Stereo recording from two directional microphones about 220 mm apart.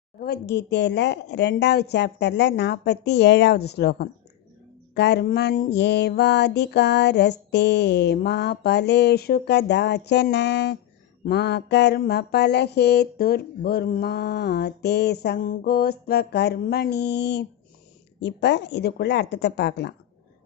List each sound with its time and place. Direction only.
0.2 s mantra: 50° left (ahead or behind)